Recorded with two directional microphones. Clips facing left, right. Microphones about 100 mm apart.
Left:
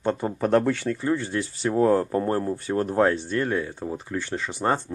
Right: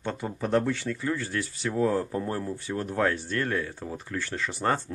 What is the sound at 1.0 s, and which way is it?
Speech, 25° left (ahead or behind).